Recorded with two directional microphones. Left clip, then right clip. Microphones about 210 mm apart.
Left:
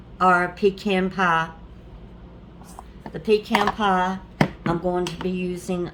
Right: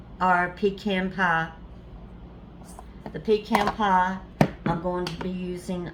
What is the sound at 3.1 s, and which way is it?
Speech, 50° left (ahead or behind).